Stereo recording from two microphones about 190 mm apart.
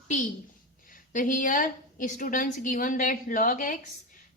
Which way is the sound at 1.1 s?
45° left (ahead or behind).